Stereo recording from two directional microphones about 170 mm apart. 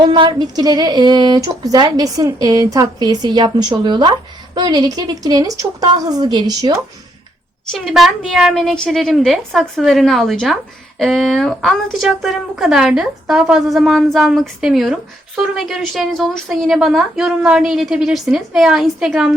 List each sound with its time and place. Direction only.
0.0 s speech: 25° right (ahead or behind)
7.7 s a woman's voice: centre (ahead or behind)